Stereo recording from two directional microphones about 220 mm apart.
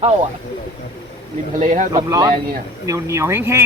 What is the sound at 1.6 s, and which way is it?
Speech, 35° right (ahead or behind).